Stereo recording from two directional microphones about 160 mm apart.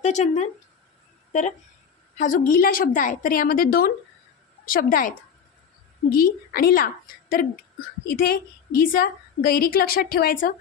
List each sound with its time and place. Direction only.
0.0 s speech: 45° left (ahead or behind)
2.1 s a woman's voice: 55° left (ahead or behind)